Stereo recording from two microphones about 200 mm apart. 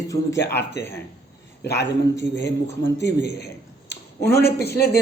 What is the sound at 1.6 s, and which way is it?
A man's voice, 55° left (ahead or behind).